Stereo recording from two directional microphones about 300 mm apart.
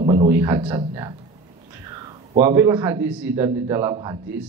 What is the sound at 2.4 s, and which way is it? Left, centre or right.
A man's voice, centre.